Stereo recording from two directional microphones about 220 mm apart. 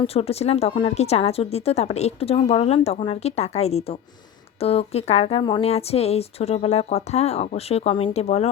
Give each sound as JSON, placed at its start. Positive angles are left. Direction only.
{"t": 0.0, "sound": "speech", "side_deg": 25}